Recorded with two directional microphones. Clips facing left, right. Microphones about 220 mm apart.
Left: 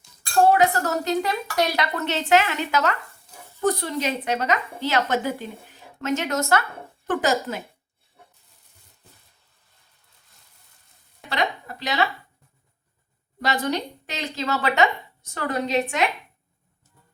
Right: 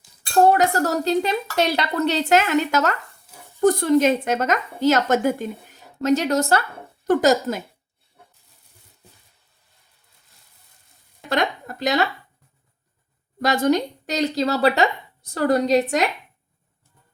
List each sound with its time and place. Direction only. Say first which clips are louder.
0.5 s a woman's voice: right 1 dB; 40° right (ahead or behind)
11.3 s speech: right 4 dB; 45° right (ahead or behind)
13.4 s speech: right 6 dB; 45° right (ahead or behind)